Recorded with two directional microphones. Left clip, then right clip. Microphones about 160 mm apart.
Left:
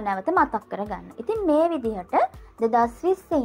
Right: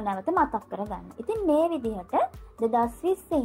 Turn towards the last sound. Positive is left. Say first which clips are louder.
# left 3 dB
turn(degrees=20)  # may be behind; listen again after turning